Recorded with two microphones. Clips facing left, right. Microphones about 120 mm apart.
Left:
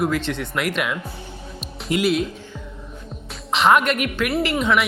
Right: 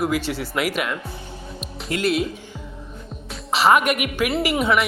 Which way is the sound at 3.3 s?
5° right (ahead or behind).